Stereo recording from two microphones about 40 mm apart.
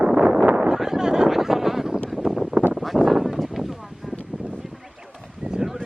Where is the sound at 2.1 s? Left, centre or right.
Centre.